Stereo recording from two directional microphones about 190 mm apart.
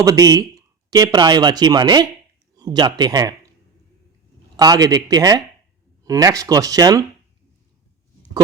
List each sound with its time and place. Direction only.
0.0 s speech: 20° right (ahead or behind)
4.5 s speech: 20° right (ahead or behind)